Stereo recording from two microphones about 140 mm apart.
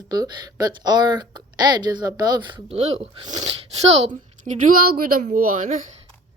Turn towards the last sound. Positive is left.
turn(degrees=-65)  # may be behind; listen again after turning